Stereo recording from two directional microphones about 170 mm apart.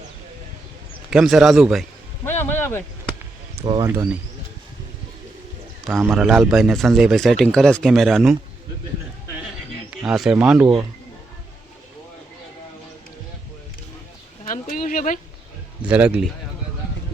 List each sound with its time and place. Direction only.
1.1 s speech: 5° right (ahead or behind)
2.2 s a sound: 10° left (ahead or behind)
3.6 s speech: 30° right (ahead or behind)
6.0 s speech: 5° right (ahead or behind)
10.0 s speech: 5° right (ahead or behind)
14.4 s a sound: 55° left (ahead or behind)
15.8 s a man's voice: 10° right (ahead or behind)